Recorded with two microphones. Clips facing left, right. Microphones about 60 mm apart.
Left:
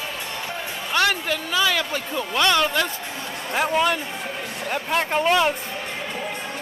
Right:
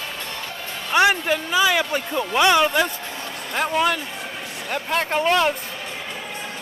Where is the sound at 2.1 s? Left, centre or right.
Centre.